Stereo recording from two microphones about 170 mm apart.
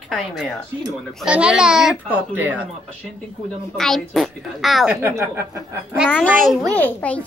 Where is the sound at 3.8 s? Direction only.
Centre (ahead or behind).